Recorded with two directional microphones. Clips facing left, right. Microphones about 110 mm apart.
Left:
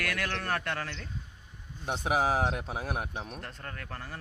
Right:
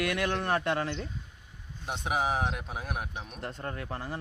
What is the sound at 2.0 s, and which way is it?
Speech, 40° left (ahead or behind).